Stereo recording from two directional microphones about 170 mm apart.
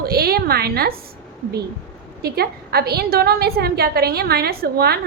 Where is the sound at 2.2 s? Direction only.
65° right (ahead or behind).